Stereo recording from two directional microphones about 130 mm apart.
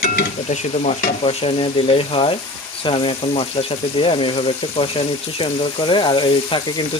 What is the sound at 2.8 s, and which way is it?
Speech, 40° left (ahead or behind).